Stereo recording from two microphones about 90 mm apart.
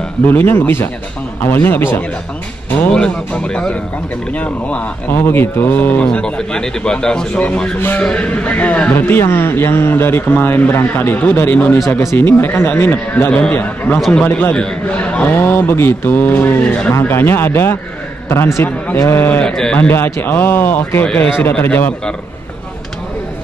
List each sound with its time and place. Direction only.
0.3 s speech: 25° left (ahead or behind)
2.9 s speech: 10° left (ahead or behind)
13.9 s a man's voice: 5° left (ahead or behind)
14.2 s speech: 20° left (ahead or behind)
16.9 s speech: 25° left (ahead or behind)
19.4 s speech: 10° left (ahead or behind)
19.9 s speech: 25° left (ahead or behind)